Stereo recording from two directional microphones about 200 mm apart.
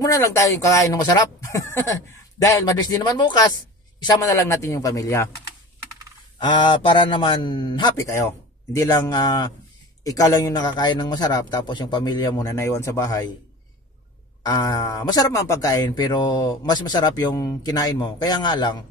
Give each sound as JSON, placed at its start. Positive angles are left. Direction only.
{"t": 0.0, "sound": "speech", "side_deg": 15}
{"t": 6.4, "sound": "speech", "side_deg": 25}
{"t": 14.4, "sound": "speech", "side_deg": 20}